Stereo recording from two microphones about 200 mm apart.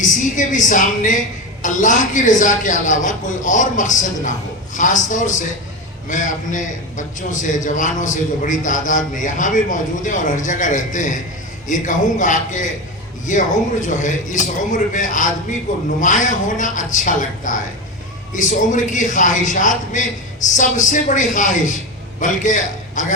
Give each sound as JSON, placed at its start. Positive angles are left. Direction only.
{"t": 0.0, "sound": "a man's voice", "side_deg": 40}